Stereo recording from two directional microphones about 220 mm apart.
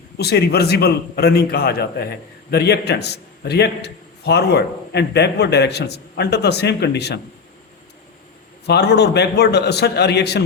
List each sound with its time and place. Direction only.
0.2 s a man's voice: 45° left (ahead or behind)
8.6 s a man's voice: 50° left (ahead or behind)